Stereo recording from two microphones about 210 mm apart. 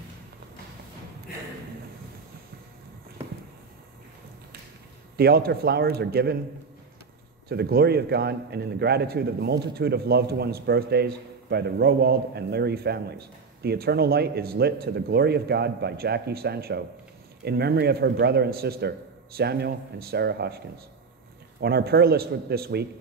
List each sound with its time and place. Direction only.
5.1 s a man's voice: 45° right (ahead or behind)
7.4 s a man's voice: 50° right (ahead or behind)